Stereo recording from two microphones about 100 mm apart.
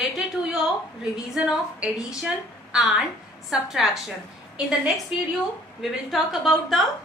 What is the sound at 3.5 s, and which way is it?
Speech, centre (ahead or behind).